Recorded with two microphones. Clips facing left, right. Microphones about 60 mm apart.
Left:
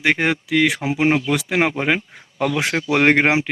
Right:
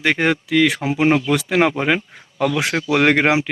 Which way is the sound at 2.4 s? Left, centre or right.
Left.